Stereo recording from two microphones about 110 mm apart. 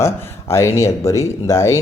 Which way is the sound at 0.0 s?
25° left (ahead or behind).